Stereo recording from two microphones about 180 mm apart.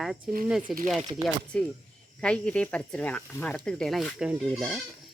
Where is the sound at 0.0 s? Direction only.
Centre (ahead or behind).